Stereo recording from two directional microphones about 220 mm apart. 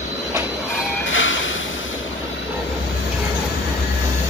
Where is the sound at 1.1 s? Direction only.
60° left (ahead or behind).